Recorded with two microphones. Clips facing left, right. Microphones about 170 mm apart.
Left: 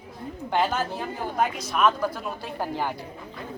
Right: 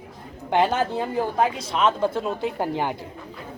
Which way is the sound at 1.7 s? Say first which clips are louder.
Even; 25° right (ahead or behind).